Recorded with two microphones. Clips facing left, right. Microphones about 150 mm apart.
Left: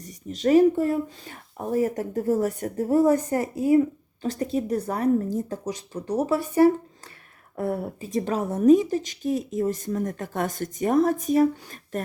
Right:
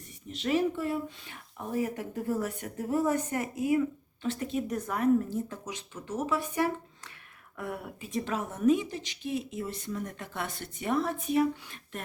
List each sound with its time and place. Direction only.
0.0 s speech: 40° left (ahead or behind)